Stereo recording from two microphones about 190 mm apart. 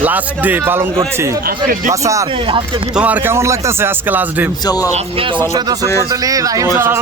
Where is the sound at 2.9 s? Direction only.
10° right (ahead or behind).